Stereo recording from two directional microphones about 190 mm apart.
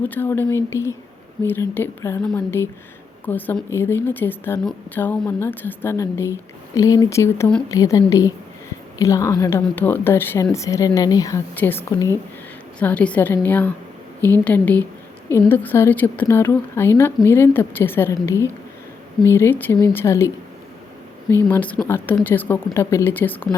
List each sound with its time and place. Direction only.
0.1 s a woman's voice: 10° left (ahead or behind)
21.4 s a woman's voice: 10° left (ahead or behind)